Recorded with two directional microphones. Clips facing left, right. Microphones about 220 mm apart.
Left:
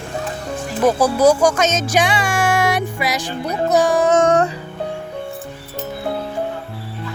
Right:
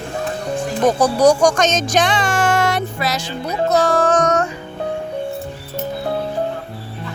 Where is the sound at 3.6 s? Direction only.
15° left (ahead or behind); by 4.5 s 30° left (ahead or behind).